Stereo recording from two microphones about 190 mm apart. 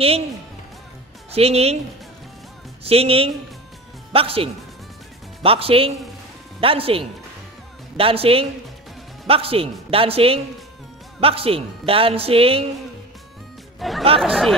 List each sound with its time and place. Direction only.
1.3 s a woman's voice: 30° right (ahead or behind)
2.8 s a woman's voice: 30° right (ahead or behind)
13.7 s music: centre (ahead or behind)
14.0 s a man's voice: 30° right (ahead or behind)